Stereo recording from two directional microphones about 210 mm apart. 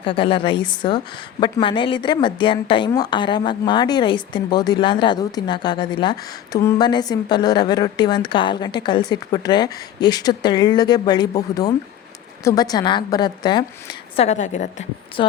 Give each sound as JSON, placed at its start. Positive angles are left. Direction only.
{"t": 0.0, "sound": "a woman's voice", "side_deg": 25}
{"t": 14.2, "sound": "a woman's voice", "side_deg": 35}